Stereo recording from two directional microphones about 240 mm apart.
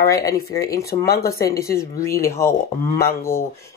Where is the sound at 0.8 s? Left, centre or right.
Left.